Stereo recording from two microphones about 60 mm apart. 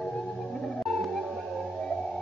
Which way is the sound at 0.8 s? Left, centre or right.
Centre.